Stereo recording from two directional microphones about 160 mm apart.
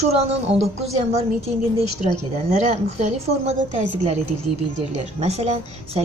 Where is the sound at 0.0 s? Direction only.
40° right (ahead or behind).